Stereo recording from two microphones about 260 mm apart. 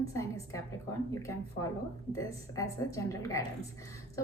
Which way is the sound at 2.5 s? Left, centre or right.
Centre.